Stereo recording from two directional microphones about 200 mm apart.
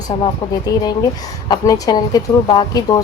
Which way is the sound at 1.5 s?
20° left (ahead or behind).